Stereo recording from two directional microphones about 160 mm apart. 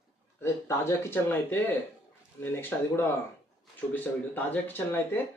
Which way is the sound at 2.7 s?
15° left (ahead or behind).